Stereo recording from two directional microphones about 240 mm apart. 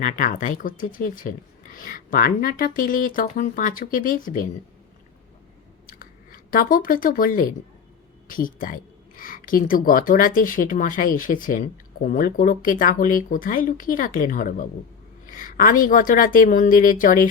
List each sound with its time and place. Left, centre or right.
0.0 s speech: left
5.8 s a sound: left
8.3 s speech: left